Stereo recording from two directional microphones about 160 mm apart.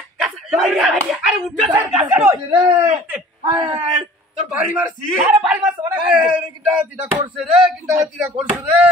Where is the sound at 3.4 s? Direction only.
30° right (ahead or behind).